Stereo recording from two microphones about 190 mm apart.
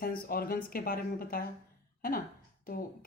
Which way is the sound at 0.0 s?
50° left (ahead or behind).